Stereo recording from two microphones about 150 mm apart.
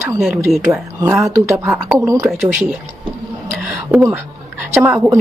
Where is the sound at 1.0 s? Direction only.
15° right (ahead or behind).